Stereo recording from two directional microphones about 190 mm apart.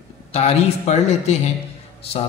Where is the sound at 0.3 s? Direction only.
35° left (ahead or behind).